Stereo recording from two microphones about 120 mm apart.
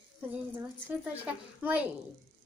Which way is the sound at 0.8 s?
15° right (ahead or behind).